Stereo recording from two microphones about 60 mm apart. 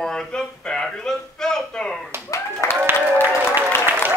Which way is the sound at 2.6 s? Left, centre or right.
Left.